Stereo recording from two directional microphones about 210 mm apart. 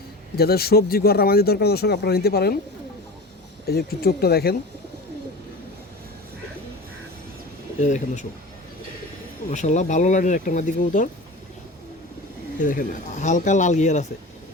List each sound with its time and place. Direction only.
0.3 s speech: 50° left (ahead or behind)
3.7 s speech: 45° left (ahead or behind)
7.8 s speech: 35° left (ahead or behind)
9.5 s speech: 35° left (ahead or behind)
12.5 s speech: 40° left (ahead or behind)